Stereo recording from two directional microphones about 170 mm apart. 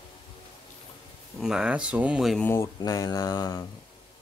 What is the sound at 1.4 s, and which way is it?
Speech, 5° right (ahead or behind).